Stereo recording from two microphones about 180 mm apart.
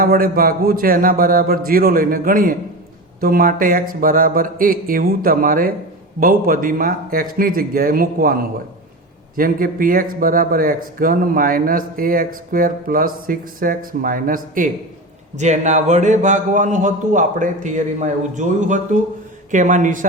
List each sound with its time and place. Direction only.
0.0 s speech: 55° right (ahead or behind)